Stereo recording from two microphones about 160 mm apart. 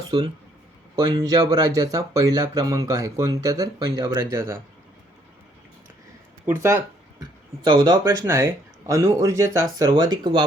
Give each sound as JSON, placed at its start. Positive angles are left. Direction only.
{"t": 0.1, "sound": "speech", "side_deg": -30}
{"t": 6.4, "sound": "speech", "side_deg": -15}
{"t": 7.6, "sound": "speech", "side_deg": -30}